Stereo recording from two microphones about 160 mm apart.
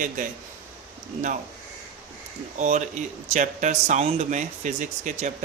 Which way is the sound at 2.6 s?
50° right (ahead or behind).